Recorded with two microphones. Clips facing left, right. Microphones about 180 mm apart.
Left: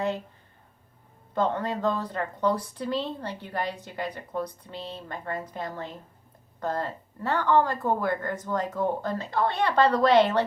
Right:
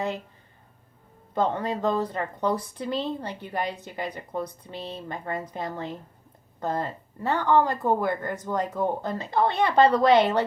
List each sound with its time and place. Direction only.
1.4 s speech: 15° right (ahead or behind)